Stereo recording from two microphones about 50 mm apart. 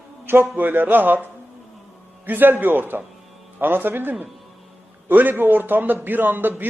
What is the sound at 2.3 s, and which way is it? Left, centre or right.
A man's voice, right.